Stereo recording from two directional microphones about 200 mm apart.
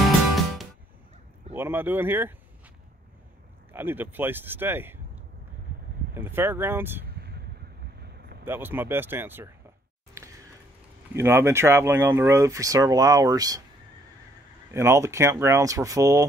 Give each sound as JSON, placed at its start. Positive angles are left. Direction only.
{"t": 0.0, "sound": "music", "side_deg": 0}
{"t": 1.5, "sound": "speech", "side_deg": -10}
{"t": 3.7, "sound": "speech", "side_deg": -10}
{"t": 7.2, "sound": "vehicle", "side_deg": -55}
{"t": 8.5, "sound": "speech", "side_deg": -10}
{"t": 11.1, "sound": "speech", "side_deg": -10}
{"t": 14.7, "sound": "speech", "side_deg": -15}